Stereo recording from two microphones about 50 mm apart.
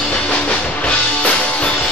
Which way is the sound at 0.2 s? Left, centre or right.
Left.